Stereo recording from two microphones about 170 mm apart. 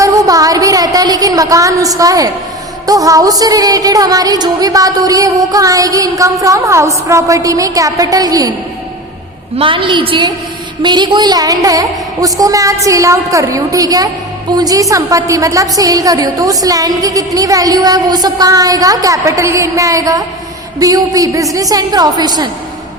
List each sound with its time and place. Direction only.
0.0 s a sound: 20° right (ahead or behind)
2.8 s a woman's voice: 20° right (ahead or behind)
9.6 s a woman's voice: 30° right (ahead or behind)